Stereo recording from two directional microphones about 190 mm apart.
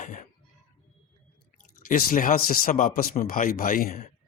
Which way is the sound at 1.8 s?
45° left (ahead or behind).